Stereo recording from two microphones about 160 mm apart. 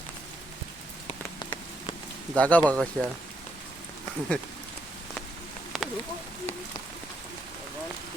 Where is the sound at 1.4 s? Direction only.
30° left (ahead or behind).